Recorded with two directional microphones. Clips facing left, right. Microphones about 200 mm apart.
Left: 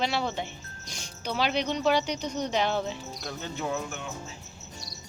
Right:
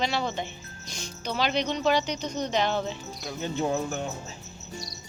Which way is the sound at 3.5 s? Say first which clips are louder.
Right 6 dB; 30° right (ahead or behind).